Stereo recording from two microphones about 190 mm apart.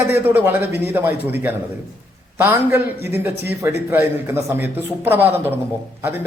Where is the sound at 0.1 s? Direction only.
10° right (ahead or behind).